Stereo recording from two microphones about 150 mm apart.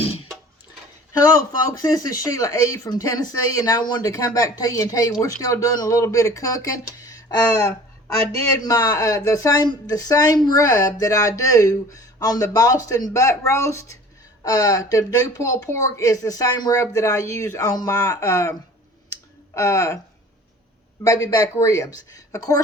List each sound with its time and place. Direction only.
0.0 s music: 40° left (ahead or behind)
1.7 s speech: 25° left (ahead or behind)
19.1 s clicking: 20° left (ahead or behind)
21.0 s speech: 25° left (ahead or behind)